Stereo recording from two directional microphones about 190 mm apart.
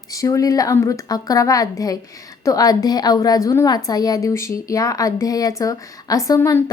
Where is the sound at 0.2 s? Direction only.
15° left (ahead or behind).